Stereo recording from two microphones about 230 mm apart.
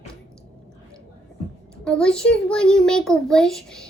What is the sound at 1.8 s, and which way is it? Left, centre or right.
A child's voice, centre.